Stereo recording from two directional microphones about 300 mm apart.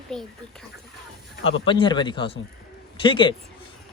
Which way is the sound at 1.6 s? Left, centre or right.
Centre.